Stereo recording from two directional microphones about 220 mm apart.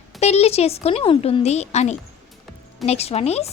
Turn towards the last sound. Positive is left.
turn(degrees=30)  # may be behind; listen again after turning